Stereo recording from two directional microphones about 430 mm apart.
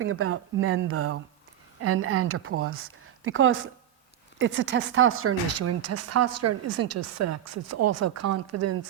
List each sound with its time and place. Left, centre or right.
0.0 s speech: right